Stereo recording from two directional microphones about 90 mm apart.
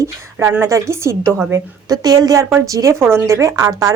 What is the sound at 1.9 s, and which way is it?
A woman's voice, 45° right (ahead or behind).